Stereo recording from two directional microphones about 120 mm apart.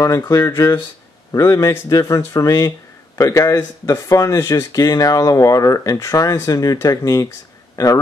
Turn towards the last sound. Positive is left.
turn(degrees=30)  # may be behind; listen again after turning